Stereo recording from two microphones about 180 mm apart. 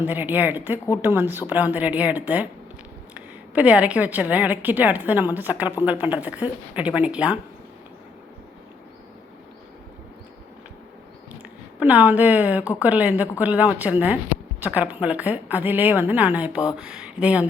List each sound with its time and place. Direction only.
0.0 s a woman's voice: 10° right (ahead or behind)
11.8 s a woman's voice: 10° right (ahead or behind)